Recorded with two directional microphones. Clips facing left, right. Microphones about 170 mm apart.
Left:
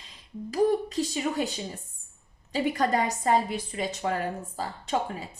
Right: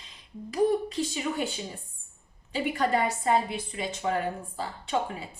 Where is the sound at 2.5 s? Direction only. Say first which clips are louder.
Left 1 dB; 40° left (ahead or behind).